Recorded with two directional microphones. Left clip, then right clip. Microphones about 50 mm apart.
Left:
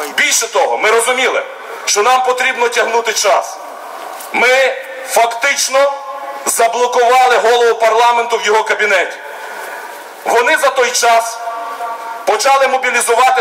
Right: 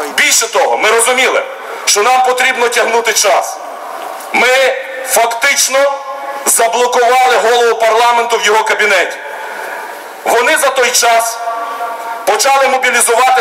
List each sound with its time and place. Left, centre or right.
0.1 s a man's voice: right
8.3 s a man's voice: right
10.3 s a man's voice: right